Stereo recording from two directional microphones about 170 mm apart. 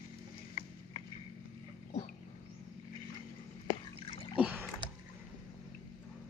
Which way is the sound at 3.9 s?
35° left (ahead or behind).